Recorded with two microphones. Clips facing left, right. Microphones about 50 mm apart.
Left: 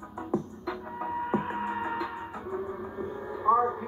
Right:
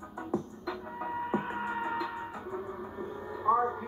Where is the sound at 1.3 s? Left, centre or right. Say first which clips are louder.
Left 2 dB; centre.